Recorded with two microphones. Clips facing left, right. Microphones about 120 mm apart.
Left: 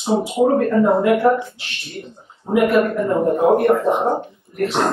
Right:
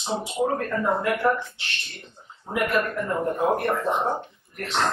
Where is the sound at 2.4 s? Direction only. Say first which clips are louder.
Left 9 dB; 30° left (ahead or behind).